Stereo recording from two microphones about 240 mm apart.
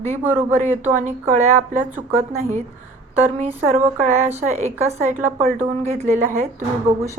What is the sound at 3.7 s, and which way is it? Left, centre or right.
A woman's voice, right.